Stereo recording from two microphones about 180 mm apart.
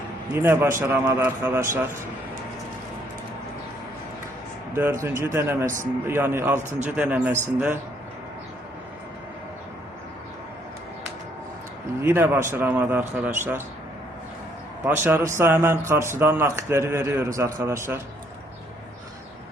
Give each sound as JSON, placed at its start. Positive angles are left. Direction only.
{"t": 0.3, "sound": "a man's voice", "side_deg": -15}
{"t": 4.7, "sound": "a man's voice", "side_deg": -15}
{"t": 12.0, "sound": "a man's voice", "side_deg": -10}
{"t": 14.8, "sound": "a man's voice", "side_deg": -10}